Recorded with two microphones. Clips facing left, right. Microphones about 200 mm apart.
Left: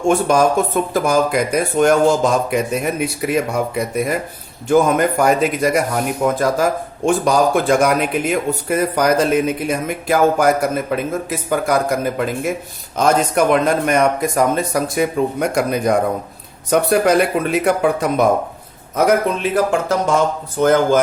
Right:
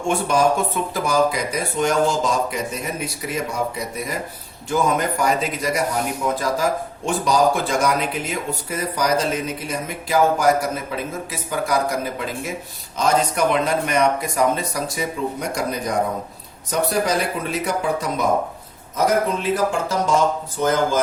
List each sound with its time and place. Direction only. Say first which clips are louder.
0.1 s a man's voice: left 4 dB; 45° left (ahead or behind)